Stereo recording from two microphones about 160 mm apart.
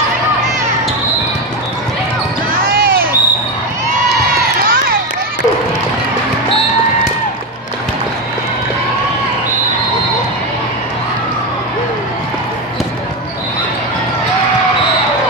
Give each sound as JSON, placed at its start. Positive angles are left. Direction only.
{"t": 2.6, "sound": "basketball bounce", "side_deg": -65}